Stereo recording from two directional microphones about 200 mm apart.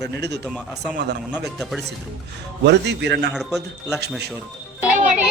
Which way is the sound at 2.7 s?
60° right (ahead or behind).